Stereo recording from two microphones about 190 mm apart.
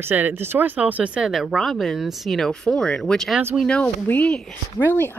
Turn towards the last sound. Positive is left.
turn(degrees=10)  # may be behind; listen again after turning